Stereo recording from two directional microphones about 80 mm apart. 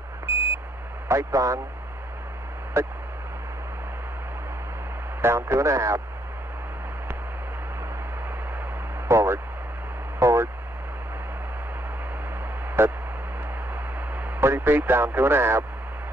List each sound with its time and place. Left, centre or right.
1.0 s speech: right
2.8 s speech: right
5.2 s speech: right
9.0 s a sound: right
10.1 s vehicle: right
12.8 s a sound: right
14.4 s speech: right